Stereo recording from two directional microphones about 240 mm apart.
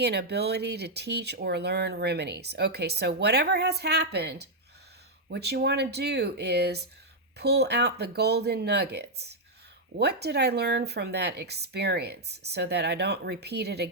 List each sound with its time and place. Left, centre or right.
0.0 s speech: right